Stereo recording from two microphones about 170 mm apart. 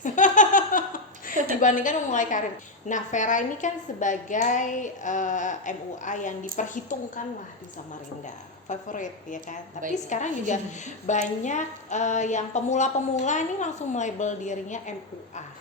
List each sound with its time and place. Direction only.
0.0 s a sound: 50° left (ahead or behind)
1.6 s a woman's voice: 50° left (ahead or behind)
8.7 s a woman's voice: 50° left (ahead or behind)